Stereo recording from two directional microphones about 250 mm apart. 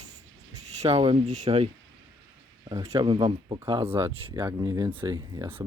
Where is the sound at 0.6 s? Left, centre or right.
Right.